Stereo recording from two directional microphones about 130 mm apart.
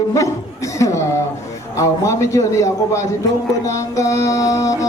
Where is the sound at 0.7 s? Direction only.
25° left (ahead or behind).